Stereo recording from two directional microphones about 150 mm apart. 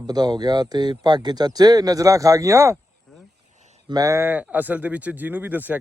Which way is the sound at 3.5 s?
50° right (ahead or behind).